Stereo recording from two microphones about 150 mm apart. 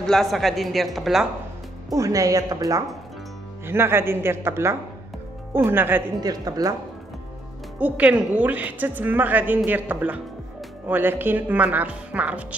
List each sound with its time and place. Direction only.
0.0 s a woman's voice: centre (ahead or behind)
1.9 s a woman's voice: 20° right (ahead or behind)
6.2 s a woman's voice: 25° right (ahead or behind)
7.8 s a woman's voice: 10° right (ahead or behind)